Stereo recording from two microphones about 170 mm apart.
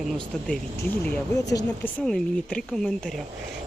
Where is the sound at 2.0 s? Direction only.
5° left (ahead or behind).